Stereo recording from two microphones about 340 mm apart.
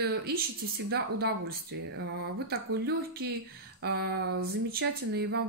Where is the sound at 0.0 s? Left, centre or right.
Right.